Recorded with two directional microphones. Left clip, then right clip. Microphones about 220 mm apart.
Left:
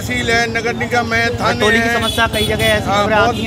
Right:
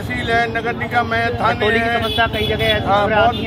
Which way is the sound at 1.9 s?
55° left (ahead or behind).